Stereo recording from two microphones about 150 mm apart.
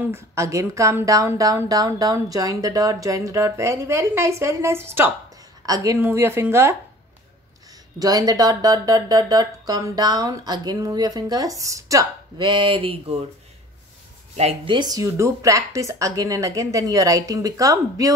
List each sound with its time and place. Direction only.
0.3 s a woman's voice: 20° right (ahead or behind)
8.0 s speech: 25° right (ahead or behind)
14.3 s speech: 45° right (ahead or behind)
14.7 s speech: 25° right (ahead or behind)